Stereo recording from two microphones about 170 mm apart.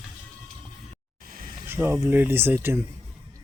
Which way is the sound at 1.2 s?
55° right (ahead or behind).